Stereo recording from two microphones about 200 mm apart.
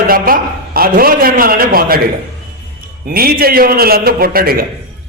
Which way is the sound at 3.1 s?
50° right (ahead or behind).